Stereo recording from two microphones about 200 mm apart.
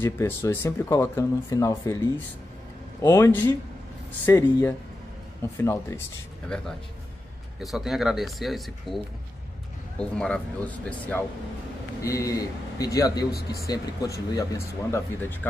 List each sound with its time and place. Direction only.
0.0 s speech: 10° left (ahead or behind)
7.6 s speech: centre (ahead or behind)